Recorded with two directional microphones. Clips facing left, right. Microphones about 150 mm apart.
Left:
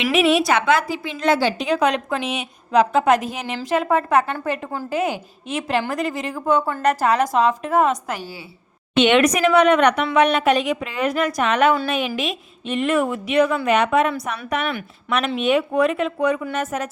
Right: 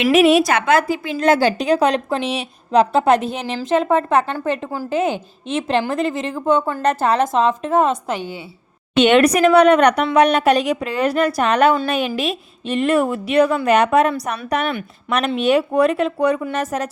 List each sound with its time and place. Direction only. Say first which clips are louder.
0.1 s a woman's voice: right 4 dB; 45° right (ahead or behind); by 8.4 s 25° right (ahead or behind)
9.0 s a woman's voice: right 3 dB; 40° right (ahead or behind)